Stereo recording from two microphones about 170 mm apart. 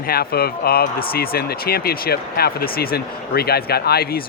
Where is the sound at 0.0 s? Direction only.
60° left (ahead or behind).